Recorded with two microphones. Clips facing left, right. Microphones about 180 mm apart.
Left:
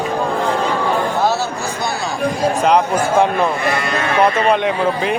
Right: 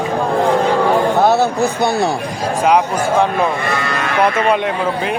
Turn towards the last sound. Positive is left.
turn(degrees=0)  # may be behind; listen again after turning